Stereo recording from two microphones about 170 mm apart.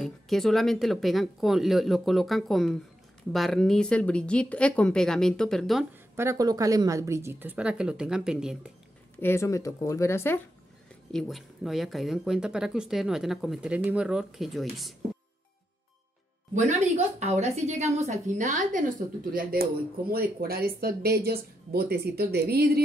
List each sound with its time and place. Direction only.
0.0 s speech: centre (ahead or behind)
6.1 s a woman's voice: 20° right (ahead or behind)
9.2 s speech: 15° left (ahead or behind)
11.1 s speech: centre (ahead or behind)
16.5 s a woman's voice: 40° right (ahead or behind)
19.3 s speech: 60° right (ahead or behind)